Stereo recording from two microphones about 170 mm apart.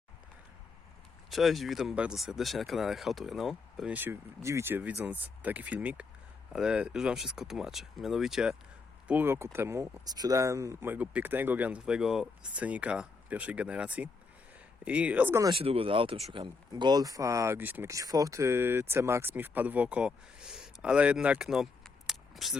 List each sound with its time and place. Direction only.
1.3 s speech: centre (ahead or behind)
15.5 s speech: 35° right (ahead or behind); by 22.5 s centre (ahead or behind)